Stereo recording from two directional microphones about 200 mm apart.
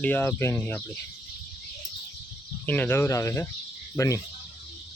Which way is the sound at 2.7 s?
10° left (ahead or behind).